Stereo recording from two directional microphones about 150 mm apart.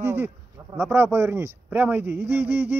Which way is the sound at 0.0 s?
15° right (ahead or behind).